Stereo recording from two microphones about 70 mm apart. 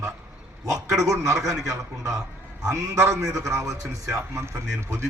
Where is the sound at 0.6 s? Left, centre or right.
Right.